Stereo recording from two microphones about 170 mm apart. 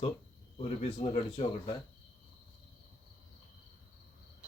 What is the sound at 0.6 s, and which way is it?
Speech, 40° left (ahead or behind).